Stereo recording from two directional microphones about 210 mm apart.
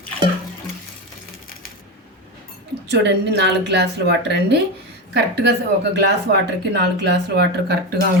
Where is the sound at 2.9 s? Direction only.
55° right (ahead or behind).